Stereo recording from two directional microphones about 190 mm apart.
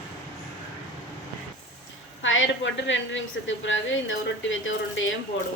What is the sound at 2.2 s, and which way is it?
A woman's voice, 90° left.